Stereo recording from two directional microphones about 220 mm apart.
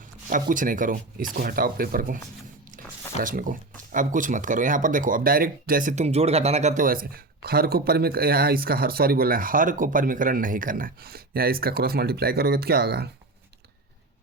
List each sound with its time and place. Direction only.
0.3 s speech: 35° right (ahead or behind)